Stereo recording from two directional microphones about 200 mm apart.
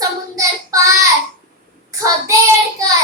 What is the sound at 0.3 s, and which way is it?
Child singing, 15° right (ahead or behind).